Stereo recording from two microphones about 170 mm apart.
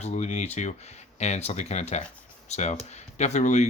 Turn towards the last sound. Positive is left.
turn(degrees=45)  # may be behind; listen again after turning